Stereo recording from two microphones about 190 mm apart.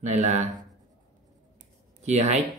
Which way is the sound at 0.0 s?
40° right (ahead or behind).